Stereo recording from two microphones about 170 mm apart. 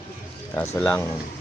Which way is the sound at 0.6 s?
10° left (ahead or behind).